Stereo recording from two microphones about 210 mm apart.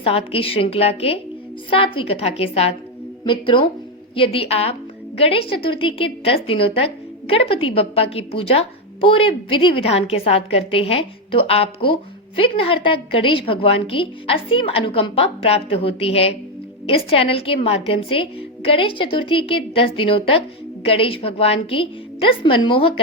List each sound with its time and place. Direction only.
0.0 s a woman's voice: 25° left (ahead or behind)